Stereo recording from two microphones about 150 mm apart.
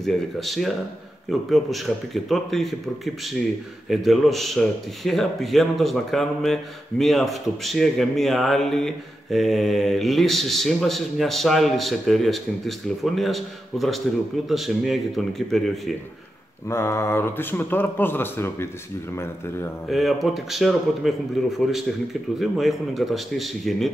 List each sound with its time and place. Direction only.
0.0 s speech: centre (ahead or behind)
3.9 s speech: centre (ahead or behind)
16.6 s speech: 20° left (ahead or behind)
19.9 s speech: centre (ahead or behind)